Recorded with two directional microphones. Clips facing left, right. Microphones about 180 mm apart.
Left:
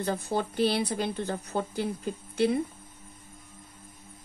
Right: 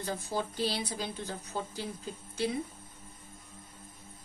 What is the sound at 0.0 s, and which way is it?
Speech, 60° left (ahead or behind).